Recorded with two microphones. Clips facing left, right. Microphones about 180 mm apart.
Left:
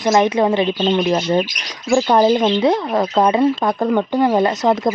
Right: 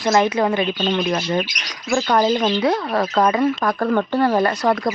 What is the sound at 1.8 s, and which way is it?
Speech, 15° left (ahead or behind).